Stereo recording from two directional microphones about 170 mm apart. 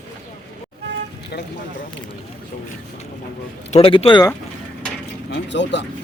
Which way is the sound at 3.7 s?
35° left (ahead or behind).